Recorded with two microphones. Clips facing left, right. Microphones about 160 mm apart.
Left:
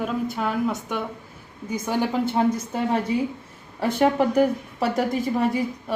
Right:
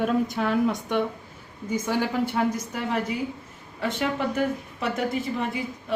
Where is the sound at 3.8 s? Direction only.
40° left (ahead or behind).